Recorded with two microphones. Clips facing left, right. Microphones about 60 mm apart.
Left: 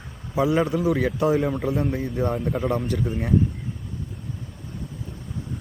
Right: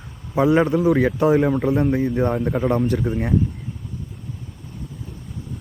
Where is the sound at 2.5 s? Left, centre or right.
Centre.